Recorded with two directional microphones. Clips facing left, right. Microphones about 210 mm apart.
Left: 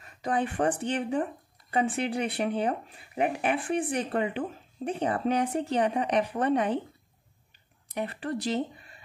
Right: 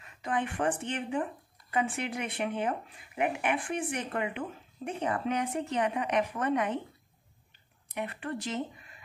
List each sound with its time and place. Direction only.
0.0 s speech: 35° left (ahead or behind)
7.9 s speech: 35° left (ahead or behind)